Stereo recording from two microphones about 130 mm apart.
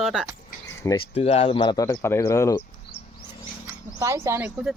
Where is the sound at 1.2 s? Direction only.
50° left (ahead or behind).